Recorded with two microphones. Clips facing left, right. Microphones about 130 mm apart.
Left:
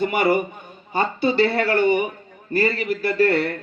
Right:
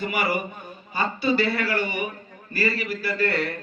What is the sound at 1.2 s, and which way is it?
A man's voice, 25° left (ahead or behind).